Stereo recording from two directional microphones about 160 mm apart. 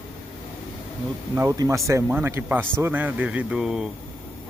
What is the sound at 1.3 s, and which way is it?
A man's voice, 20° right (ahead or behind).